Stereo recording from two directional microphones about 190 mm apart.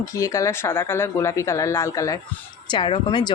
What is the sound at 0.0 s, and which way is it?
Speech, 15° left (ahead or behind).